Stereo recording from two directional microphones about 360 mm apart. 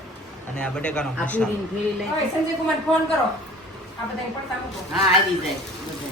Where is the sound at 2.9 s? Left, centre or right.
Centre.